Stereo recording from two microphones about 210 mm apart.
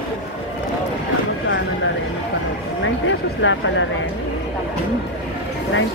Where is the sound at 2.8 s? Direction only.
65° left (ahead or behind).